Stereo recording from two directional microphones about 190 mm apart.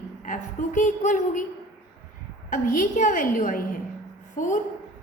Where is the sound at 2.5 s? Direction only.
40° left (ahead or behind).